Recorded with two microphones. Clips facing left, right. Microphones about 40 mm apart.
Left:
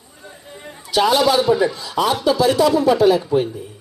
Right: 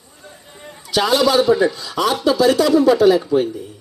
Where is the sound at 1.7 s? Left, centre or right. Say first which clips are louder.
Even; centre.